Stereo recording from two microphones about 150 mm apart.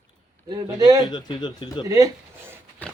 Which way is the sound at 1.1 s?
30° left (ahead or behind).